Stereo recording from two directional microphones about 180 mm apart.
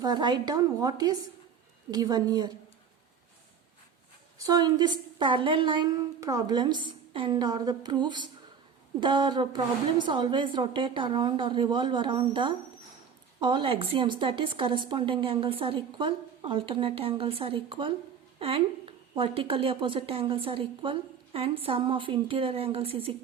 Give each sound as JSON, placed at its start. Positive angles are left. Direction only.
{"t": 0.0, "sound": "a woman's voice", "side_deg": -25}
{"t": 4.4, "sound": "a woman's voice", "side_deg": -20}